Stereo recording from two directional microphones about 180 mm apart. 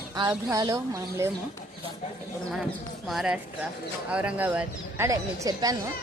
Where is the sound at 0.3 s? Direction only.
20° right (ahead or behind).